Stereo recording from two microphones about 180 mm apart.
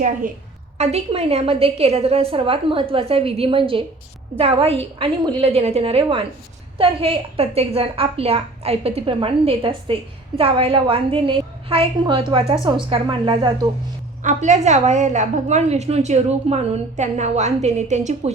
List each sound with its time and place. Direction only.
0.8 s a woman's voice: 35° right (ahead or behind)
14.2 s a woman's voice: 45° right (ahead or behind)